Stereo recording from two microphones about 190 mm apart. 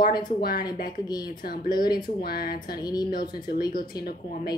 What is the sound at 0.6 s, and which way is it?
Speech, 20° left (ahead or behind).